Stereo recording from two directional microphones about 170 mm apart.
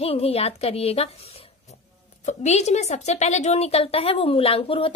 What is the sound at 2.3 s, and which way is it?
A woman's voice, 40° left (ahead or behind).